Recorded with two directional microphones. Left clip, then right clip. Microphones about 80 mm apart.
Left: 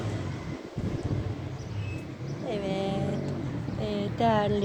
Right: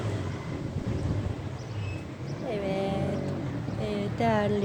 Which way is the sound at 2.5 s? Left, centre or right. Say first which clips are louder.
Right 1 dB; right.